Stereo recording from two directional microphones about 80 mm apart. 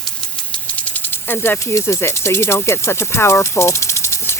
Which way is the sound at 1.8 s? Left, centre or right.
Left.